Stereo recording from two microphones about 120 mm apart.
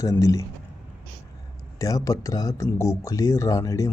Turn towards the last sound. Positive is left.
turn(degrees=25)  # may be behind; listen again after turning